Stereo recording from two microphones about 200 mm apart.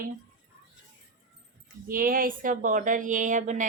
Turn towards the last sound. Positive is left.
turn(degrees=-40)  # may be behind; listen again after turning